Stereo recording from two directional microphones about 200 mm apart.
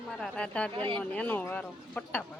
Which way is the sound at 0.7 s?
25° right (ahead or behind).